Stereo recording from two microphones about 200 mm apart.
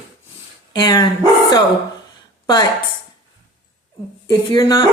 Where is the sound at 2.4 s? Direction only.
20° left (ahead or behind).